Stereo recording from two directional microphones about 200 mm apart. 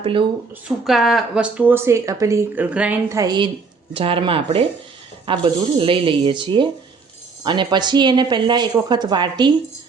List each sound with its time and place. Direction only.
0.0 s speech: 25° right (ahead or behind)
0.9 s speech: centre (ahead or behind); by 9.3 s 20° right (ahead or behind)